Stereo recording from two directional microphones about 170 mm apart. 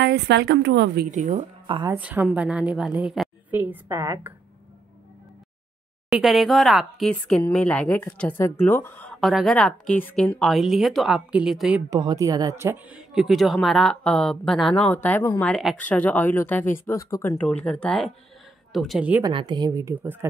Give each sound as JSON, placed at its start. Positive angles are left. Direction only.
{"t": 0.0, "sound": "a woman's voice", "side_deg": -85}
{"t": 1.1, "sound": "speech", "side_deg": -45}
{"t": 1.7, "sound": "a woman's voice", "side_deg": -25}
{"t": 2.0, "sound": "a woman's voice", "side_deg": -10}
{"t": 6.0, "sound": "speech", "side_deg": 0}
{"t": 11.9, "sound": "speech", "side_deg": -20}
{"t": 19.2, "sound": "a woman's voice", "side_deg": -30}